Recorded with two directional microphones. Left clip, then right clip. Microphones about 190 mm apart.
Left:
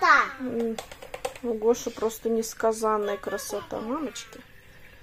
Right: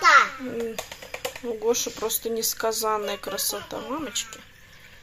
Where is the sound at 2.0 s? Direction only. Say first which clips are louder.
Left 3 dB; 20° left (ahead or behind).